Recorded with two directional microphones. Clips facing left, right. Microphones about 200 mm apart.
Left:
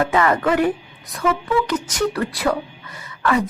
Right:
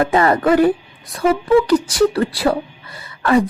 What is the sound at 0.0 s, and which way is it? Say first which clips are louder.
A woman's voice: right 3 dB; 35° right (ahead or behind).